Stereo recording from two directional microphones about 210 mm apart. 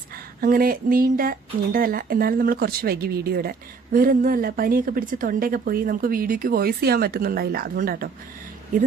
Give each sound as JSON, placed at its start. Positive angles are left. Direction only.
{"t": 0.4, "sound": "a woman's voice", "side_deg": -45}